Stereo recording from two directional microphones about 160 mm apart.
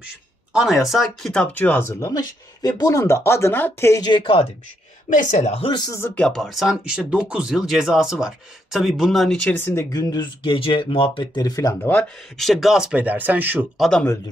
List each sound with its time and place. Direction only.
0.0 s speech: 5° right (ahead or behind); by 4.5 s 35° left (ahead or behind)
5.1 s speech: 45° left (ahead or behind); by 6.0 s 25° left (ahead or behind)
6.1 s speech: 5° left (ahead or behind); by 11.9 s 20° left (ahead or behind)
11.9 s speech: 5° left (ahead or behind); by 13.7 s 10° right (ahead or behind)
13.7 s speech: centre (ahead or behind)